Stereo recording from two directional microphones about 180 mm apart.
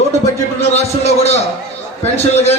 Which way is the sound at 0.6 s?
35° left (ahead or behind).